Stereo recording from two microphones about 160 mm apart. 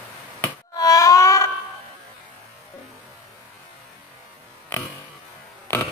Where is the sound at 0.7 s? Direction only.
20° left (ahead or behind).